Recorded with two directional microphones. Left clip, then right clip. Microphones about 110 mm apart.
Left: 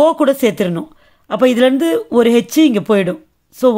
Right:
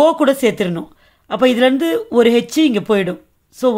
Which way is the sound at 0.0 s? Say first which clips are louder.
Left 1 dB; 30° left (ahead or behind).